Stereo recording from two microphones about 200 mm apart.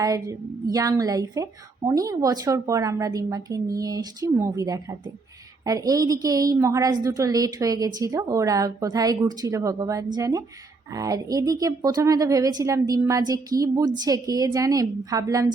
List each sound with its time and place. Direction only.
0.0 s a woman's voice: 15° right (ahead or behind)